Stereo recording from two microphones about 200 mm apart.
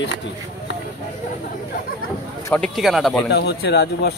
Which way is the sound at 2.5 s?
Centre (ahead or behind).